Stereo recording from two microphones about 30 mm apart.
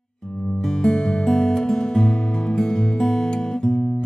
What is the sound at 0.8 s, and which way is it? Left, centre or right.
Music, left.